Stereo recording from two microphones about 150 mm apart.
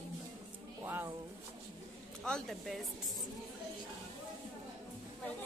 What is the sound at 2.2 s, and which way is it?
Speech, 5° left (ahead or behind).